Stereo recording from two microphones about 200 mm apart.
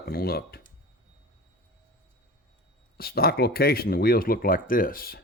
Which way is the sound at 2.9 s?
50° left (ahead or behind).